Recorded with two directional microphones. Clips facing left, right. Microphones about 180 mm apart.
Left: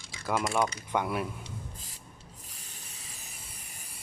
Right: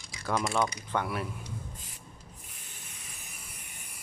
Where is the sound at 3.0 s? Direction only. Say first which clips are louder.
Even; 30° left (ahead or behind).